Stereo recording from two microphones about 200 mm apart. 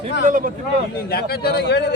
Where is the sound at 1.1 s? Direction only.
50° left (ahead or behind).